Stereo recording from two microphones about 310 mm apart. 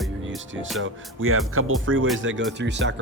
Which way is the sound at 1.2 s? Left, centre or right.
Right.